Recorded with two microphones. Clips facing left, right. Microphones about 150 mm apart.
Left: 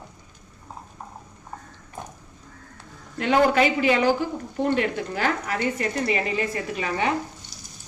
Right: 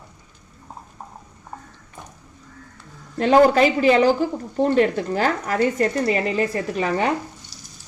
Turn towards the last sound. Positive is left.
turn(degrees=-40)  # may be behind; listen again after turning